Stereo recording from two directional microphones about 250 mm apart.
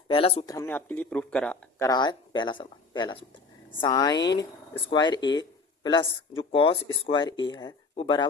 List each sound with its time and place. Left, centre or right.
0.1 s speech: left
0.5 s speech: centre
4.2 s speech: left
4.7 s speech: centre